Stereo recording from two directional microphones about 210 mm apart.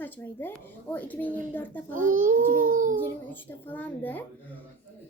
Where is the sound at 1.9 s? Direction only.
40° right (ahead or behind).